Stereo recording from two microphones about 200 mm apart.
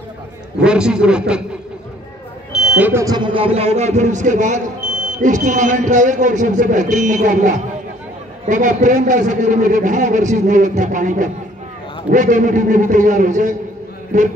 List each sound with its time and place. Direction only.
0.7 s a man's voice: 5° right (ahead or behind)
2.8 s speech: 15° right (ahead or behind); by 14.3 s 40° right (ahead or behind)